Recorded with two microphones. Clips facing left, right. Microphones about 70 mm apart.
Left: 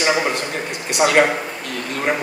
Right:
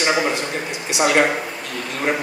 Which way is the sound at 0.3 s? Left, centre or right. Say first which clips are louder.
Even; left.